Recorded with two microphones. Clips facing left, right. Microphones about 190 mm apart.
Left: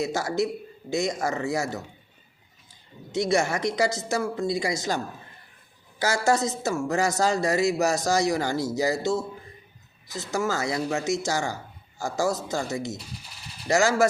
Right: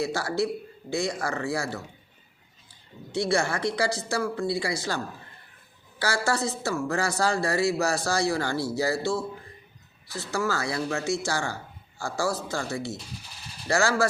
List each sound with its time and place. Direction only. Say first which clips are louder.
0.0 s speech: left 1 dB; 20° left (ahead or behind)
3.1 s speech: left 2 dB; 20° left (ahead or behind)
6.2 s speech: left 4 dB; 20° left (ahead or behind)